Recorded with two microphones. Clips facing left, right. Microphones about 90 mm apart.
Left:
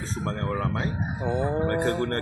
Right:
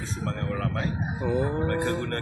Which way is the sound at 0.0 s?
35° left (ahead or behind).